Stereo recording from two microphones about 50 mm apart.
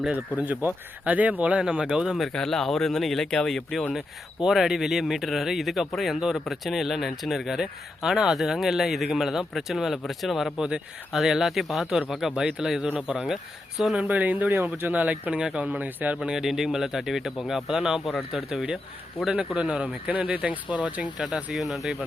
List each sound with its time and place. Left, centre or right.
0.1 s speech: right
1.7 s speech: centre
2.3 s a man's voice: centre
10.6 s speech: centre
12.3 s speech: centre
14.0 s speech: right
16.2 s speech: centre
19.5 s speech: right
21.2 s a man's voice: centre